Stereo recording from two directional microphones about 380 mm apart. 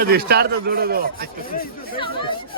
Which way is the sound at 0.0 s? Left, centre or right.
Right.